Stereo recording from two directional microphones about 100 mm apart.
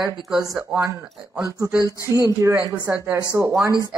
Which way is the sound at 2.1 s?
30° right (ahead or behind).